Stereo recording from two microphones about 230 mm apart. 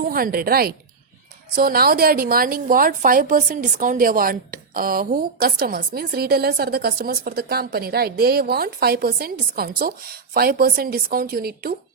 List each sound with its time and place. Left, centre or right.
0.0 s a woman's voice: right